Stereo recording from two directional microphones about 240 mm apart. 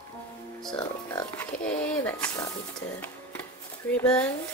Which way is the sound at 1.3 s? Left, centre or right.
Centre.